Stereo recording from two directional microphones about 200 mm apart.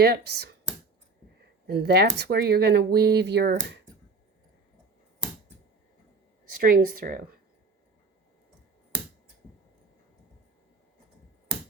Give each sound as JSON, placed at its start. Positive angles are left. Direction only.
{"t": 0.0, "sound": "speech", "side_deg": -55}
{"t": 1.6, "sound": "speech", "side_deg": -55}
{"t": 6.6, "sound": "speech", "side_deg": -45}